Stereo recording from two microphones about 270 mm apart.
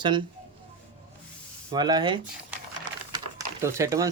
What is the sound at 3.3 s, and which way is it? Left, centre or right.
Speech, centre.